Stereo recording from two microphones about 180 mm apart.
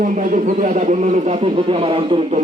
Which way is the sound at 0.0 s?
45° right (ahead or behind).